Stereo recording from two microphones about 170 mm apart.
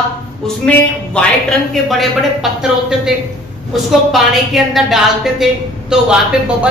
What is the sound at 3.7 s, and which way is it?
A woman's voice, centre (ahead or behind).